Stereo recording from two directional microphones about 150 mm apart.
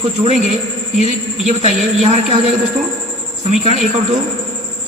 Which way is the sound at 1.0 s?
45° right (ahead or behind).